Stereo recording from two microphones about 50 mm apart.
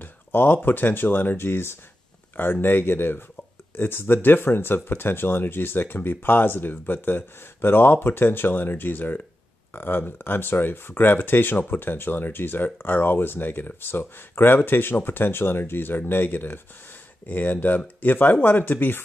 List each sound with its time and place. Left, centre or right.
0.0 s speech: left